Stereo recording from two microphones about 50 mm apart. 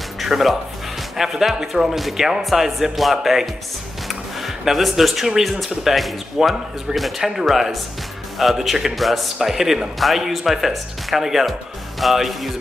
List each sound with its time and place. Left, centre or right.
0.2 s a man's voice: centre